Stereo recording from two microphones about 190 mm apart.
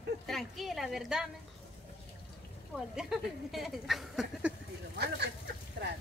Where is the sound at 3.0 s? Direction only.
Centre (ahead or behind).